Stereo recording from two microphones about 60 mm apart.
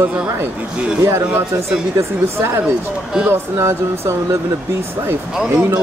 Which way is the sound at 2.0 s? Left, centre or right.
Right.